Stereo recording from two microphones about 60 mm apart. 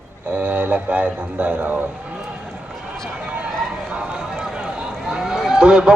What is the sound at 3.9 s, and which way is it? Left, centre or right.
Run, centre.